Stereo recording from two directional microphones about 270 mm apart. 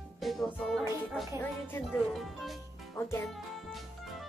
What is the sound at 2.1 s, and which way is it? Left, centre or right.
Music, centre.